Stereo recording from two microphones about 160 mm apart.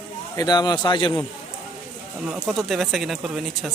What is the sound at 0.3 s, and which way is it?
Speech, 25° left (ahead or behind).